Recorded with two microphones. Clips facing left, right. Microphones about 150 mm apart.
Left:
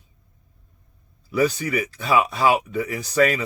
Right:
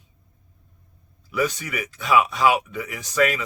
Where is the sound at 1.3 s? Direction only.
35° left (ahead or behind).